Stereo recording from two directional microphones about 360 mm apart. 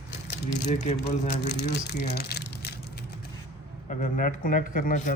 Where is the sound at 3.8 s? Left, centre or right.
Left.